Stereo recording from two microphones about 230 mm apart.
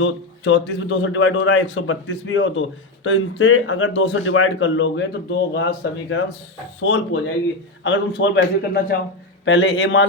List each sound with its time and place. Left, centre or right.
0.0 s speech: left